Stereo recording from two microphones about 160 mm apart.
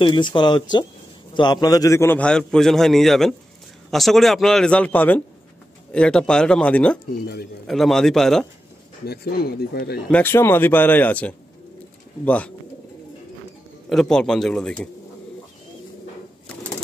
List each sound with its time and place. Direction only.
0.0 s a man's voice: 30° left (ahead or behind); by 7.0 s 5° left (ahead or behind)
7.1 s speech: 75° left (ahead or behind)
7.6 s a man's voice: centre (ahead or behind)
9.0 s speech: 80° left
10.0 s a man's voice: 10° left (ahead or behind)
13.8 s a man's voice: centre (ahead or behind)